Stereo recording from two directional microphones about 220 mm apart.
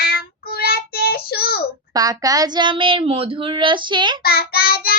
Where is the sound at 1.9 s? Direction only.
15° right (ahead or behind).